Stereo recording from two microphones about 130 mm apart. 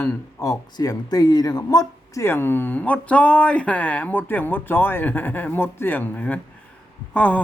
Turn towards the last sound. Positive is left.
turn(degrees=10)  # may be behind; listen again after turning